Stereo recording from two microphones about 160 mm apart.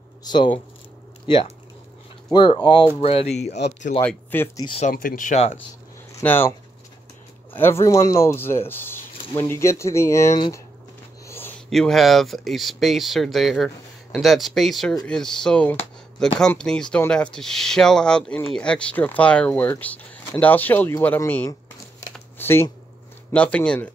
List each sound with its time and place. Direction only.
0.2 s speech: 25° left (ahead or behind)
4.0 s speech: 10° left (ahead or behind)
4.9 s speech: 55° left (ahead or behind)
6.1 s speech: 15° left (ahead or behind)
7.5 s speech: 15° left (ahead or behind)
11.2 s a sound: 15° left (ahead or behind)
11.7 s speech: centre (ahead or behind)
22.1 s shuffling cards: 15° left (ahead or behind)
23.3 s speech: 5° left (ahead or behind)